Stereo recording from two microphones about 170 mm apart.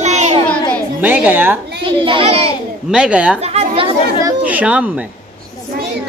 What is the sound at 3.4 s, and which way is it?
Children playing, 35° right (ahead or behind).